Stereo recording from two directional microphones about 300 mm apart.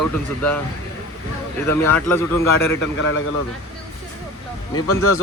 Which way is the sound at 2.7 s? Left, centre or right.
Left.